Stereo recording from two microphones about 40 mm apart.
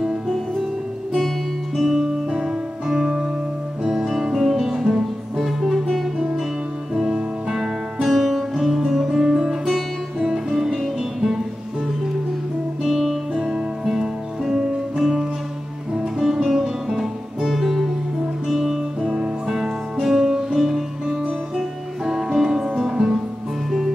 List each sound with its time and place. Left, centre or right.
1.8 s music: centre
8.1 s music: centre
12.8 s music: centre
16.4 s music: centre